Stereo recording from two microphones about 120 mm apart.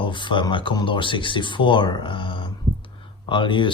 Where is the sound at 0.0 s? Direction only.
40° left (ahead or behind).